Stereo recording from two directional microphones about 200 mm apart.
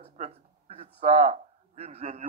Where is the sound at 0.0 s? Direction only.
30° right (ahead or behind).